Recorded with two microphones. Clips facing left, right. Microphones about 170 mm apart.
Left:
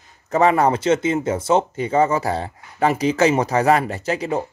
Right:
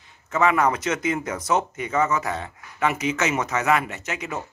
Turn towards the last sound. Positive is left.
turn(degrees=35)  # may be behind; listen again after turning